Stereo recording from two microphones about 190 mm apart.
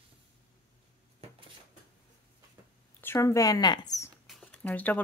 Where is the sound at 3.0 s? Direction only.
15° left (ahead or behind).